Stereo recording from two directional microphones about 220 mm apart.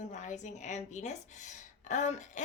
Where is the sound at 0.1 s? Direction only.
35° left (ahead or behind).